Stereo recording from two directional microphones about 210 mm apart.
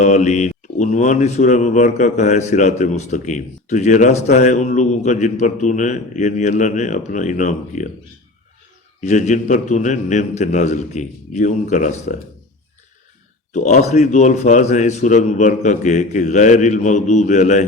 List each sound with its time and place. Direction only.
0.0 s speech: 35° left (ahead or behind)
9.0 s speech: 35° left (ahead or behind)
13.5 s speech: 35° left (ahead or behind)